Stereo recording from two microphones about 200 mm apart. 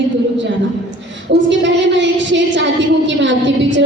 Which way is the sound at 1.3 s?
65° right (ahead or behind).